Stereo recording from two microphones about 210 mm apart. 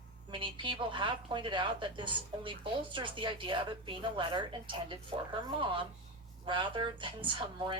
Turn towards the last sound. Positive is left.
turn(degrees=-25)  # may be behind; listen again after turning